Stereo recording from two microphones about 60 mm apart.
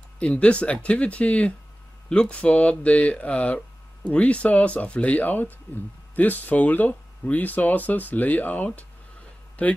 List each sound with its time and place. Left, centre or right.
0.2 s speech: centre